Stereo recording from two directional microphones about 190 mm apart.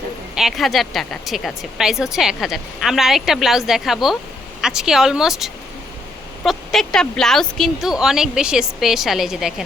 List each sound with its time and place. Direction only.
0.3 s speech: centre (ahead or behind)